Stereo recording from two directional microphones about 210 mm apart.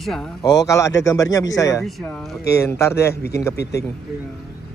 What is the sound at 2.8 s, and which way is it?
Speech, 15° left (ahead or behind).